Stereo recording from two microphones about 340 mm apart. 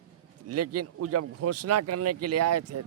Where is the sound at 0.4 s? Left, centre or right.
Right.